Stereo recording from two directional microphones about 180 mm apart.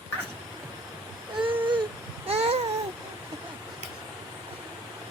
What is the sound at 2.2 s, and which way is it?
Babbling, 35° right (ahead or behind).